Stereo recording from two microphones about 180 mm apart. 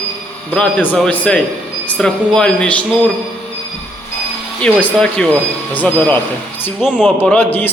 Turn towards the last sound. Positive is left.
turn(degrees=10)  # may be behind; listen again after turning